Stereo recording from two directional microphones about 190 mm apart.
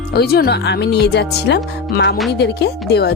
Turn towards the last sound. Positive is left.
turn(degrees=60)  # may be behind; listen again after turning